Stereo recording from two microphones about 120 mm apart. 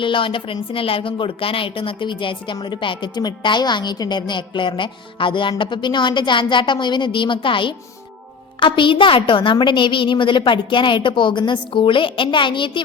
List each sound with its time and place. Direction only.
0.0 s a woman's voice: 45° left (ahead or behind)